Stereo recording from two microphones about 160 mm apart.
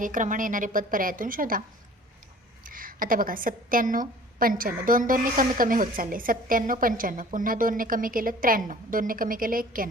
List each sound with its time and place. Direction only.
0.0 s a woman's voice: 55° right (ahead or behind)
2.6 s a woman's voice: 60° right (ahead or behind)